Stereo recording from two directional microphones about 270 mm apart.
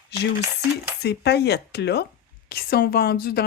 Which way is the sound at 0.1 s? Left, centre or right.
Left.